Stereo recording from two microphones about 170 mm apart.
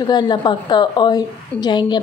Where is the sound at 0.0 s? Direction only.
25° left (ahead or behind).